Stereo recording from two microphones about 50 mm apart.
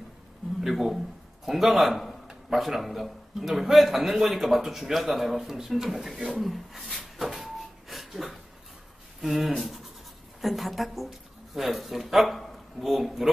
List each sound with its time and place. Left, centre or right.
0.6 s a man's voice: centre
7.2 s a sound: centre
9.2 s a man's voice: centre